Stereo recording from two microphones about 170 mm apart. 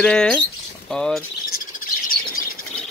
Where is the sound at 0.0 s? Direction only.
5° left (ahead or behind).